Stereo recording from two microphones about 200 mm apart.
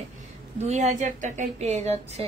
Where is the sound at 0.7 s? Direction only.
35° right (ahead or behind).